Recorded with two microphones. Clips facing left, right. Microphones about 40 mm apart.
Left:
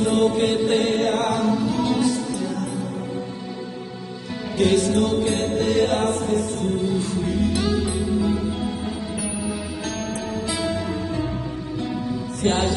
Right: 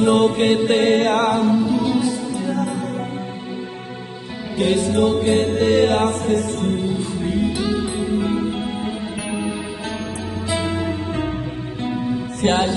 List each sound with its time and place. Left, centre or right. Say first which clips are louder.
0.0 s music: right 4 dB; right
1.7 s music: right 2 dB; centre
4.6 s music: right 1 dB; centre
5.1 s music: right 4 dB; right
7.2 s music: right 2 dB; right
7.5 s music: right 1 dB; centre
7.9 s music: right 1 dB; right
10.5 s music: right 5 dB; right